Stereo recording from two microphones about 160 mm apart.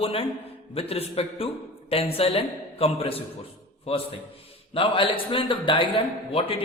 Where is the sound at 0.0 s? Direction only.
35° left (ahead or behind).